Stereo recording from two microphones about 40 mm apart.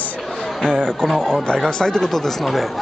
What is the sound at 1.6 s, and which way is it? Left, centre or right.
Speech, centre.